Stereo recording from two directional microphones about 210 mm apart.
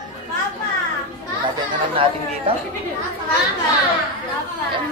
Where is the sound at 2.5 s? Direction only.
25° right (ahead or behind).